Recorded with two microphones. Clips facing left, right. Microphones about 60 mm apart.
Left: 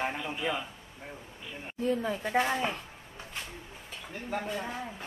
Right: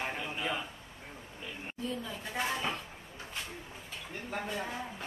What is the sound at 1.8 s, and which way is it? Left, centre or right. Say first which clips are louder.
Speech: left 9 dB; left.